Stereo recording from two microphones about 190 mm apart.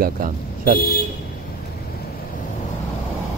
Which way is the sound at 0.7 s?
50° left (ahead or behind).